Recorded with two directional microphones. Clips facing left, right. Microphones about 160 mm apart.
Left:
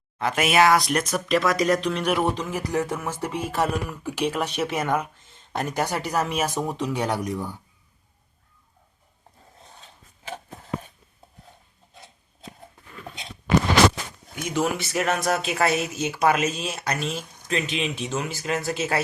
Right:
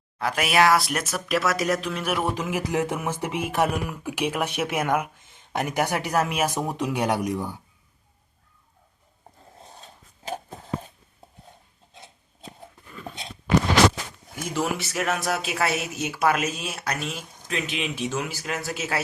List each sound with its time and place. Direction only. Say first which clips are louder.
0.2 s a man's voice: left 1 dB; centre (ahead or behind)
2.6 s speech: left 1 dB; 20° right (ahead or behind)
6.1 s a man's voice: right 1 dB; 5° right (ahead or behind)
9.6 s a sound: right 3 dB; 35° right (ahead or behind)
14.3 s a man's voice: left 2 dB; 5° right (ahead or behind)